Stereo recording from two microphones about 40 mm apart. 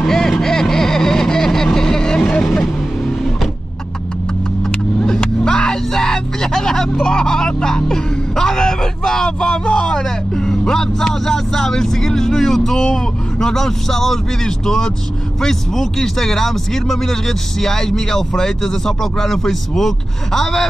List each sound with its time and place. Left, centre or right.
0.0 s vehicle: centre
5.0 s a sound: centre
10.5 s vehicle: centre
15.4 s speech: centre